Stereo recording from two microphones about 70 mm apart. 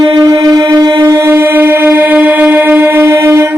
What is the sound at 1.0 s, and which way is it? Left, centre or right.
Shofar, right.